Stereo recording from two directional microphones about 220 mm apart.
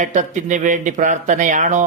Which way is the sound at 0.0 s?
35° right (ahead or behind).